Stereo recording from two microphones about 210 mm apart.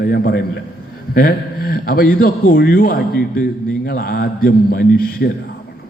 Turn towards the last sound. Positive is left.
turn(degrees=45)  # may be behind; listen again after turning